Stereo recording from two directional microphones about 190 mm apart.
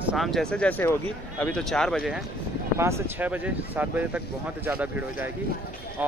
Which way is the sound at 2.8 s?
10° right (ahead or behind).